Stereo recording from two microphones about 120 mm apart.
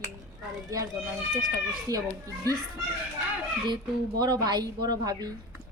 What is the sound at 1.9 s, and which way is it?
Speech, 30° right (ahead or behind).